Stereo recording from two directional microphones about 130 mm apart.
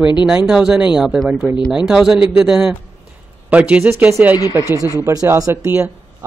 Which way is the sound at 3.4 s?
10° right (ahead or behind).